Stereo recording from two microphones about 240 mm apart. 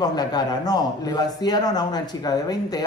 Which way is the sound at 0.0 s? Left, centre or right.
Centre.